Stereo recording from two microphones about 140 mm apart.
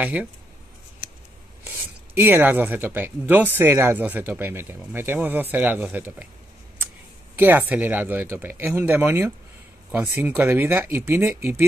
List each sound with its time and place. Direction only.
0.0 s speech: 10° right (ahead or behind)
2.1 s speech: 15° right (ahead or behind)
7.3 s speech: 15° right (ahead or behind)